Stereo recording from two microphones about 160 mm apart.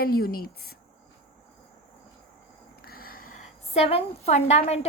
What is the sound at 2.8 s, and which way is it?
A woman's voice, 70° left (ahead or behind).